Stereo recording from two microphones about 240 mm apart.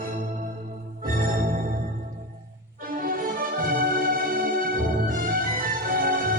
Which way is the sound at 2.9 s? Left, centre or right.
Right.